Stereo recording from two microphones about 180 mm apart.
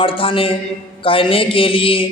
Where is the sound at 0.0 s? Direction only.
30° left (ahead or behind).